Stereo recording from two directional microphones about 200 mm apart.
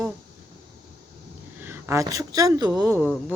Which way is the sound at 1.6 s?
10° right (ahead or behind).